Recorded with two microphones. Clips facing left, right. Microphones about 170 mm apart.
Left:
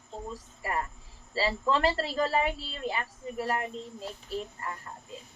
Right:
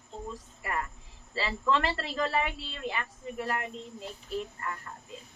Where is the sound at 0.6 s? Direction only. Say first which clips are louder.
Left 2 dB; 30° left (ahead or behind).